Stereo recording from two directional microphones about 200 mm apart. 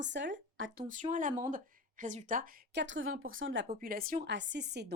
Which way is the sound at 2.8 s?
70° right (ahead or behind).